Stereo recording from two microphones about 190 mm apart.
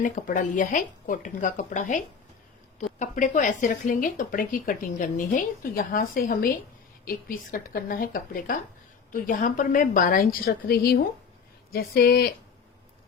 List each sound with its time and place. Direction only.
0.0 s speech: 45° left (ahead or behind)
3.0 s speech: 40° left (ahead or behind)